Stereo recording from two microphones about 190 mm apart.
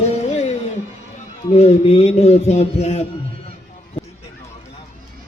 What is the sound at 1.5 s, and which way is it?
Speech, 35° left (ahead or behind).